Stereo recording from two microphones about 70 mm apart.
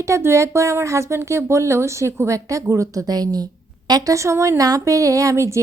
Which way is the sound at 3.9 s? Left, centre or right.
Right.